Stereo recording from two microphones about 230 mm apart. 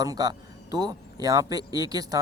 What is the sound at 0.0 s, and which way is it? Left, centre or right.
A man's voice, centre.